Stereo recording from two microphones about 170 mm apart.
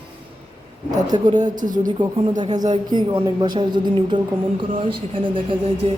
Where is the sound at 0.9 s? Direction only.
25° right (ahead or behind).